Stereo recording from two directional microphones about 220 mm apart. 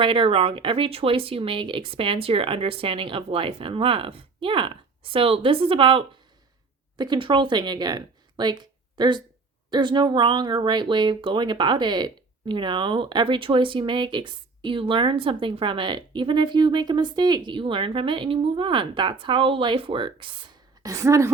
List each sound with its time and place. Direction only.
0.0 s a woman's voice: 25° right (ahead or behind)